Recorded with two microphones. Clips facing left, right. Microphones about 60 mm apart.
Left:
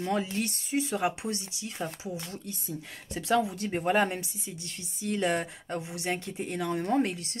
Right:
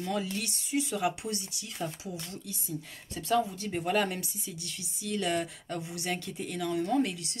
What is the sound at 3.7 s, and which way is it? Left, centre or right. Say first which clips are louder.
Speech: left 3 dB; left.